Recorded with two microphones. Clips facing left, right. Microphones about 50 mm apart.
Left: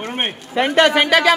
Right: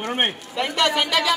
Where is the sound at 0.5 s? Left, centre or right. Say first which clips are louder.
Left 9 dB; left.